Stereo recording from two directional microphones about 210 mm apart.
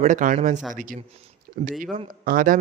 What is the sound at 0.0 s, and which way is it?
A man's voice, 35° right (ahead or behind).